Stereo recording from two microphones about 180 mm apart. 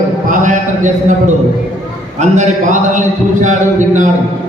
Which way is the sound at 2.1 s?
40° right (ahead or behind).